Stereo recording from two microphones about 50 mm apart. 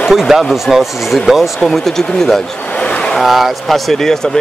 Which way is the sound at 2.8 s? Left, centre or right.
Left.